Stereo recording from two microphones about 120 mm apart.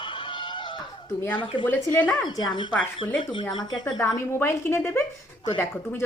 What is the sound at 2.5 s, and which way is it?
Speech, 40° left (ahead or behind).